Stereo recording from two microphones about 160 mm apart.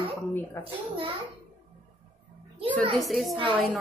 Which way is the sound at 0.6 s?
20° left (ahead or behind).